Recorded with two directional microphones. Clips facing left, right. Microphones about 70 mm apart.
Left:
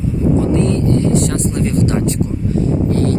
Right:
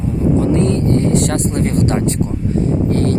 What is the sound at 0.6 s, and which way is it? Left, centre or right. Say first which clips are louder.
Speech: even; right.